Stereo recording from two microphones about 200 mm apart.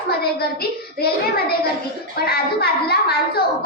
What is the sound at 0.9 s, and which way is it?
A child's voice, 50° left (ahead or behind).